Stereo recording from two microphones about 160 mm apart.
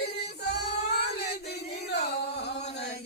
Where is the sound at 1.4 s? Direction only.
90° left.